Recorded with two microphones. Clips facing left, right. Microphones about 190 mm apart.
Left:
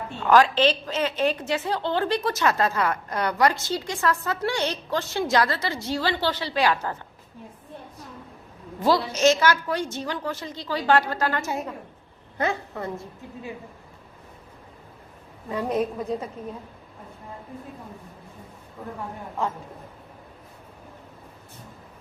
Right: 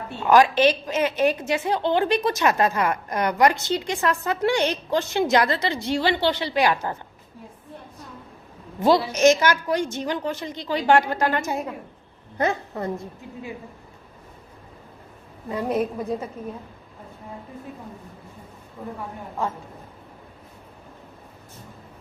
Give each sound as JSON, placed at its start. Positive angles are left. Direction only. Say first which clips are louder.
{"t": 0.2, "sound": "a woman's voice", "louder": "right 2 dB", "side_deg": -10}
{"t": 9.1, "sound": "a woman's voice", "louder": "right 2 dB", "side_deg": -20}
{"t": 15.4, "sound": "a woman's voice", "louder": "right 1 dB", "side_deg": -10}